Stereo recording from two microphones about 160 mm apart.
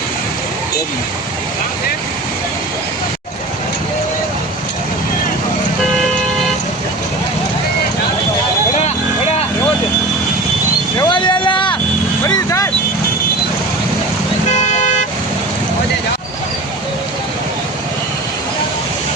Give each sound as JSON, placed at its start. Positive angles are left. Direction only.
{"t": 10.9, "sound": "vehicle", "side_deg": 30}
{"t": 12.2, "sound": "vehicle", "side_deg": 20}
{"t": 14.5, "sound": "car", "side_deg": 45}